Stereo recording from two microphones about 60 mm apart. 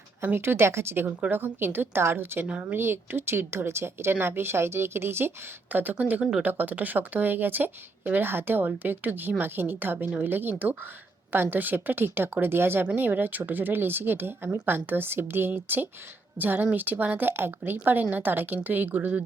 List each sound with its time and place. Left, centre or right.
0.3 s speech: right
2.4 s speech: right
2.7 s speech: right
5.7 s speech: right
6.4 s speech: right